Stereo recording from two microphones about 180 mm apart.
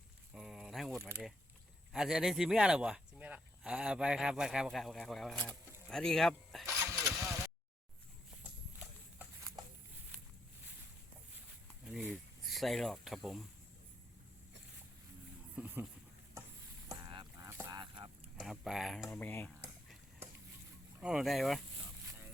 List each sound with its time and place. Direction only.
0.3 s a sound: 5° right (ahead or behind)
0.9 s speech: 15° right (ahead or behind)
1.9 s speech: 5° right (ahead or behind)
6.9 s a sound: centre (ahead or behind)
11.9 s speech: centre (ahead or behind)
15.5 s speech: 10° right (ahead or behind)
16.9 s goose: 20° right (ahead or behind)
17.5 s duck: 15° right (ahead or behind)
18.3 s speech: centre (ahead or behind)
19.1 s speech: 10° left (ahead or behind)
21.0 s speech: 5° right (ahead or behind)